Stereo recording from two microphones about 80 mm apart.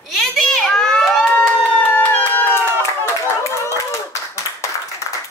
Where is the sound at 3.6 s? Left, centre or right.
Left.